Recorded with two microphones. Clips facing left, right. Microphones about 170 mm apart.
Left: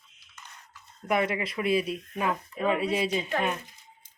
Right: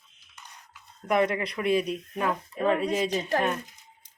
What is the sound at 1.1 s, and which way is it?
Speech, 5° left (ahead or behind).